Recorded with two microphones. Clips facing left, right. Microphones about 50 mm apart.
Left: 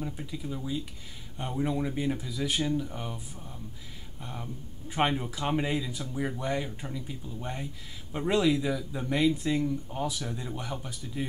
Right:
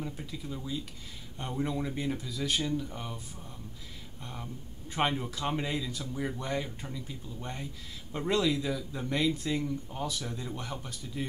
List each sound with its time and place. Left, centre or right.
0.0 s speech: centre